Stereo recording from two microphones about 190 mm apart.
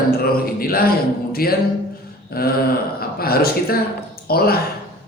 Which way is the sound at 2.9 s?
55° left (ahead or behind).